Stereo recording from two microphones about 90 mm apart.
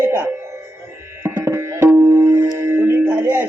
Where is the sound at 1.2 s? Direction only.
30° right (ahead or behind).